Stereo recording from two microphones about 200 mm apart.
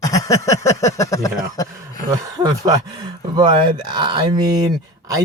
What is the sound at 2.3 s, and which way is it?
Speech, 20° right (ahead or behind).